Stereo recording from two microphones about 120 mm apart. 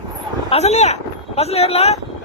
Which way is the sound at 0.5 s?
65° left (ahead or behind).